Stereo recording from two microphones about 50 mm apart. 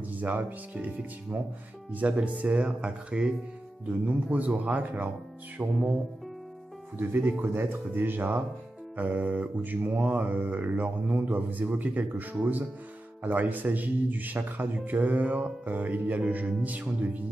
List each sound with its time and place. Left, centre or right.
0.1 s a man's voice: right
7.0 s a man's voice: right